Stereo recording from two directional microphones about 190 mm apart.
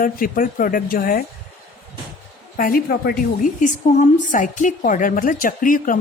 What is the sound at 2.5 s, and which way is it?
A woman's voice, 50° left (ahead or behind).